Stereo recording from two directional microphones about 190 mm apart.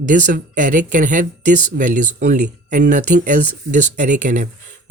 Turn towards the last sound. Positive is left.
turn(degrees=-40)  # may be behind; listen again after turning